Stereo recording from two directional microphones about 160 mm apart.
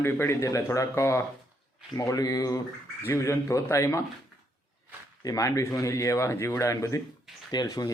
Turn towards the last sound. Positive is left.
turn(degrees=25)  # may be behind; listen again after turning